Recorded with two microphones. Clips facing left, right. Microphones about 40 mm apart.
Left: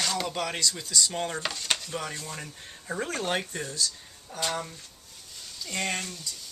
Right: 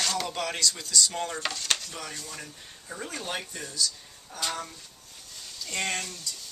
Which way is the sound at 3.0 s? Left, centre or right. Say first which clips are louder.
Left 4 dB; left.